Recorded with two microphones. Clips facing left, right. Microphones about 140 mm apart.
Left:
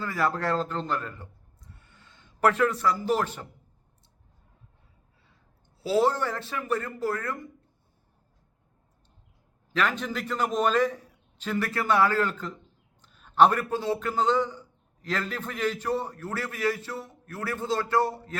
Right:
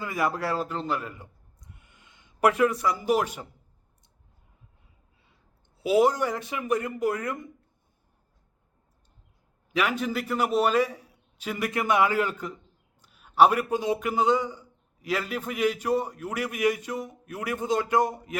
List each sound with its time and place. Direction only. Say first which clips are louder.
0.0 s a man's voice: even; 15° right (ahead or behind)
5.7 s a man's voice: right 2 dB; 15° right (ahead or behind)
9.7 s a man's voice: right 1 dB; 10° right (ahead or behind)